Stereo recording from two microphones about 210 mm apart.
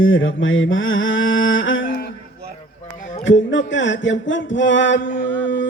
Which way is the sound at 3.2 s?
60° left (ahead or behind).